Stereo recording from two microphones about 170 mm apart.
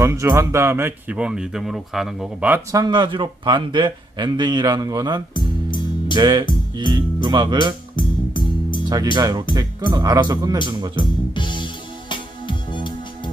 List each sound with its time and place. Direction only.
0.0 s speech: 15° right (ahead or behind)
2.7 s speech: 25° right (ahead or behind)
5.3 s music: 25° left (ahead or behind)
6.1 s speech: 25° right (ahead or behind)
7.9 s music: 30° left (ahead or behind)
9.1 s speech: 20° right (ahead or behind)
10.9 s music: 30° left (ahead or behind)